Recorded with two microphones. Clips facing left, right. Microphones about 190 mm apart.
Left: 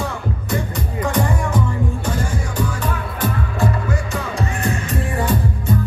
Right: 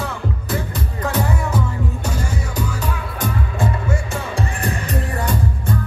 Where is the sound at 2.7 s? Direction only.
10° right (ahead or behind).